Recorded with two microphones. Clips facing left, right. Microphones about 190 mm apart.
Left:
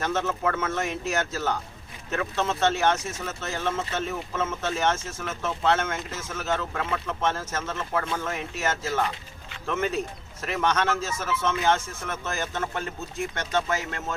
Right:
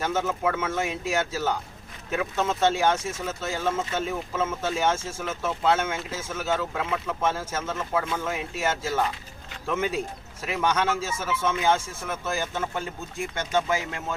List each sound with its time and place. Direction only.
0.0 s speech: 10° right (ahead or behind)